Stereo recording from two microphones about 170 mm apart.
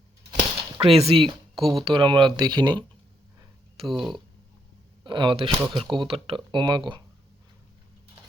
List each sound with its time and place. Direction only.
0.3 s a sound: 30° right (ahead or behind)
1.7 s speech: 30° right (ahead or behind)
3.8 s speech: centre (ahead or behind)
5.0 s speech: 30° right (ahead or behind)